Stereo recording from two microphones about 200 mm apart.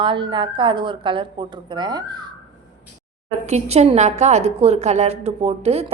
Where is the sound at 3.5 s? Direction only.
35° right (ahead or behind).